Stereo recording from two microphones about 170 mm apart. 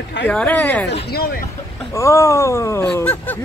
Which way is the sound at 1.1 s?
60° left (ahead or behind).